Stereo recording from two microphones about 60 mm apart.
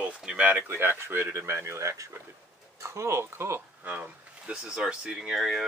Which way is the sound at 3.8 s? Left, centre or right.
Right.